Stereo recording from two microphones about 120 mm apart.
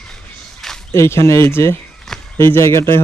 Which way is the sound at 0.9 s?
20° left (ahead or behind).